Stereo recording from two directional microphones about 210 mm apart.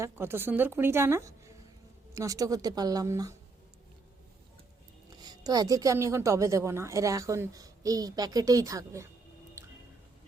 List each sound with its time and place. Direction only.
0.0 s a woman's voice: 10° right (ahead or behind)
5.2 s a woman's voice: 20° right (ahead or behind)
9.6 s music: 10° right (ahead or behind)